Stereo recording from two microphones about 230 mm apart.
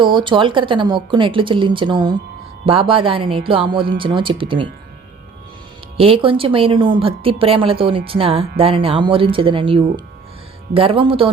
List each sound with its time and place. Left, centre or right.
0.0 s a woman's voice: right
6.0 s a woman's voice: right